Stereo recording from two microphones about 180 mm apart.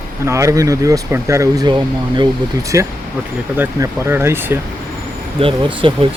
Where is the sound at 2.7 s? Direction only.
15° right (ahead or behind).